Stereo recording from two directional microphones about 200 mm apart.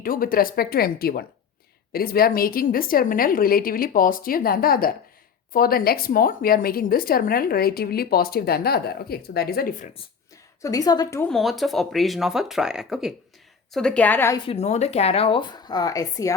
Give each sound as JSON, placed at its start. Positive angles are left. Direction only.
{"t": 0.0, "sound": "a woman's voice", "side_deg": 45}
{"t": 10.6, "sound": "a woman's voice", "side_deg": 20}
{"t": 11.3, "sound": "a woman's voice", "side_deg": 0}
{"t": 14.4, "sound": "speech", "side_deg": 30}